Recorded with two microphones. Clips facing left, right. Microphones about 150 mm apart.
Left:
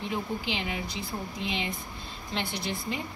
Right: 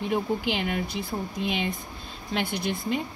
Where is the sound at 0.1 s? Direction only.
55° right (ahead or behind).